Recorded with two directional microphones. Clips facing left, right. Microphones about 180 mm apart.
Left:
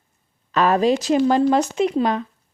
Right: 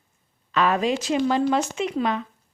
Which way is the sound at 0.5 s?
40° left (ahead or behind).